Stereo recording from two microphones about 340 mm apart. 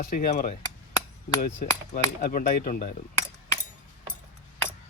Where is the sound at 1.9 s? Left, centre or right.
Left.